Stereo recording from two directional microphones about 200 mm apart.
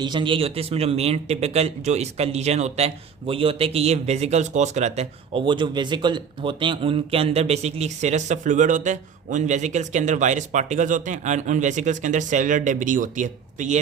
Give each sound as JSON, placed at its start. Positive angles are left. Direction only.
{"t": 0.0, "sound": "a man's voice", "side_deg": -25}